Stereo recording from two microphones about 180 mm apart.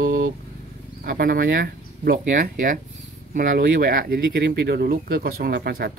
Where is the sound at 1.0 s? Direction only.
55° right (ahead or behind).